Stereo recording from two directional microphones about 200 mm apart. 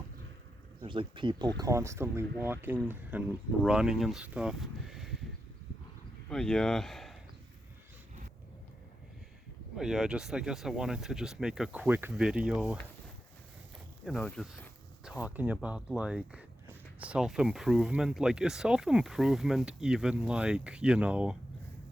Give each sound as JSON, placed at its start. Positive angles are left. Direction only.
{"t": 0.8, "sound": "speech", "side_deg": -25}
{"t": 6.3, "sound": "speech", "side_deg": 5}
{"t": 9.7, "sound": "speech", "side_deg": 0}
{"t": 14.0, "sound": "speech", "side_deg": 5}